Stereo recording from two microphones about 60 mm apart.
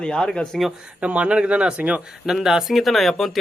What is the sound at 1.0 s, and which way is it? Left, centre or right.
A man's voice, centre.